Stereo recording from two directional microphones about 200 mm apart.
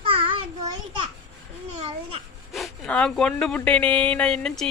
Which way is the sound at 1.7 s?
30° right (ahead or behind).